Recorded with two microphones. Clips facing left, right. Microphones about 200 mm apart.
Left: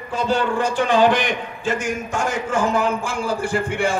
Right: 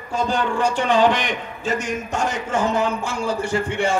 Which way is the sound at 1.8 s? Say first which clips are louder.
Even; 50° left (ahead or behind).